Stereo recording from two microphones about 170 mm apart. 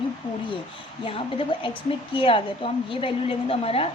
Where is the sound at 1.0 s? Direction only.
30° left (ahead or behind).